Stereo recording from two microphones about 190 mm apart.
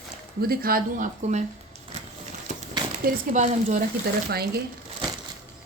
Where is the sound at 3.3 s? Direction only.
35° right (ahead or behind).